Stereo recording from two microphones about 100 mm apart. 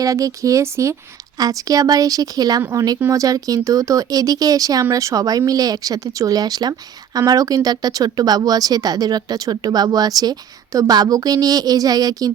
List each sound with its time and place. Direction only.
0.0 s a woman's voice: 35° right (ahead or behind)